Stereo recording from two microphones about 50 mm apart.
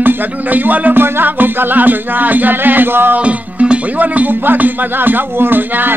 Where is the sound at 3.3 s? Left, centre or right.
Right.